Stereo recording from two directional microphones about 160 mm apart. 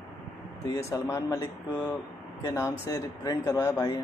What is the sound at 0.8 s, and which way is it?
Speech, 20° left (ahead or behind).